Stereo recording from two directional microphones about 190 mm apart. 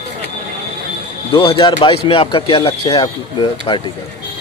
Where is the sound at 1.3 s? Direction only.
25° left (ahead or behind).